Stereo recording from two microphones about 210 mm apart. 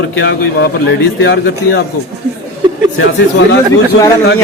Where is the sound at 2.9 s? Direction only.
60° left (ahead or behind).